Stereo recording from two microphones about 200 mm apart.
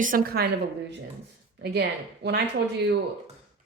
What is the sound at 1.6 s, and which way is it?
Speech, 55° right (ahead or behind).